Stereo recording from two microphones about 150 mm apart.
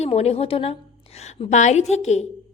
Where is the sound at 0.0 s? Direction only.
45° left (ahead or behind).